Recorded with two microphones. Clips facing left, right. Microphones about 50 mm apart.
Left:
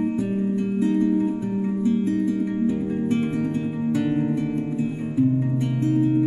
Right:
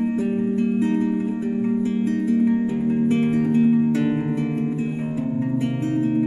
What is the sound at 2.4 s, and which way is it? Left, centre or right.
Music, centre.